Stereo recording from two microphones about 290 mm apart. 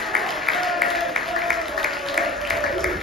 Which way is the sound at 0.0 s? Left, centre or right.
Centre.